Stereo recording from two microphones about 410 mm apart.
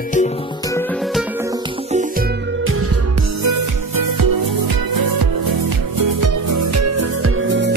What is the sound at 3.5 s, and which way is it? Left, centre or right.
Music, right.